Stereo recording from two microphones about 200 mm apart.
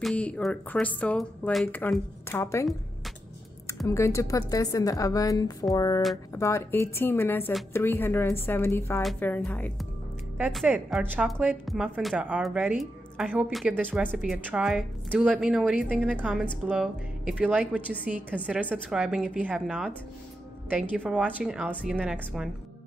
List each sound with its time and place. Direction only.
0.0 s speech: centre (ahead or behind)
3.8 s speech: 15° left (ahead or behind)
10.3 s a woman's voice: 5° right (ahead or behind)
21.1 s a woman's voice: 5° right (ahead or behind)